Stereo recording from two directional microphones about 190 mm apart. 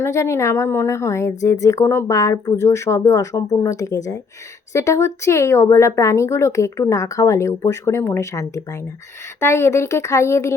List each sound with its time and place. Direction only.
0.0 s a woman's voice: 15° left (ahead or behind)